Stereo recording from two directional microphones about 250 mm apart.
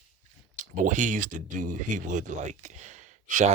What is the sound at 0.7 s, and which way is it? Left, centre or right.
Speech, right.